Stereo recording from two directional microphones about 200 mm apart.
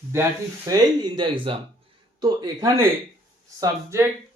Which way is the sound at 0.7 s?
20° right (ahead or behind).